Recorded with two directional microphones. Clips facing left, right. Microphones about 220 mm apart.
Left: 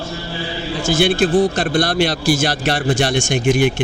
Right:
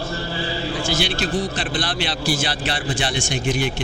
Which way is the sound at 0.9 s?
55° left (ahead or behind).